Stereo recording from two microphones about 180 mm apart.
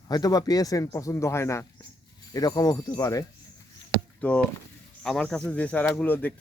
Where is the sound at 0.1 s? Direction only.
20° left (ahead or behind).